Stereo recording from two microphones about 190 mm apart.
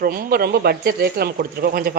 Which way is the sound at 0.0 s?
50° right (ahead or behind).